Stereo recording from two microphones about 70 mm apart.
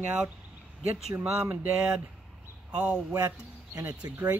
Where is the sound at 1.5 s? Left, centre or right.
Right.